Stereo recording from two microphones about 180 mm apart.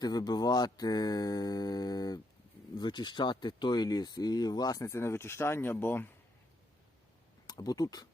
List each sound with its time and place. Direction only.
0.0 s mantra: 20° left (ahead or behind)
2.7 s speech: 25° left (ahead or behind)
7.4 s speech: 20° left (ahead or behind)